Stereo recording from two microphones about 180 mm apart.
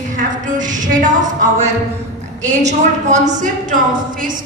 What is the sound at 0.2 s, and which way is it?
A woman's voice, 45° right (ahead or behind).